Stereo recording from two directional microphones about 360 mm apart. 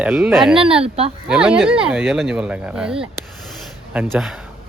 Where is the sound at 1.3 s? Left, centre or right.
Centre.